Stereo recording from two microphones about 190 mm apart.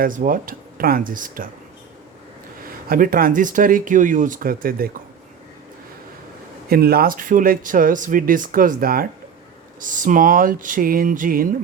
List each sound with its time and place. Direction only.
0.0 s speech: 45° right (ahead or behind)
2.9 s speech: 50° right (ahead or behind)
6.7 s speech: 55° right (ahead or behind)